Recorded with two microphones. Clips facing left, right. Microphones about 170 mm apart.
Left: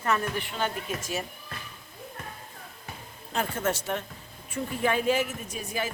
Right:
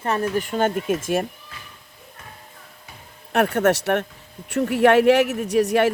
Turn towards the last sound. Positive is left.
turn(degrees=-75)  # may be behind; listen again after turning